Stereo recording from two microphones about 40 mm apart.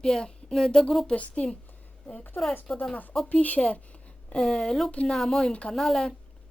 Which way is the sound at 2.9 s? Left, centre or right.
Left.